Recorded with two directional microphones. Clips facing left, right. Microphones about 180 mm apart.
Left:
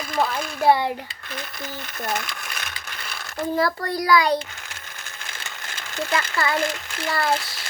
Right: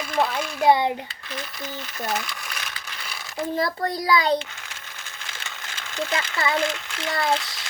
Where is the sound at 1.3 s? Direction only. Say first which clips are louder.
Even; centre (ahead or behind).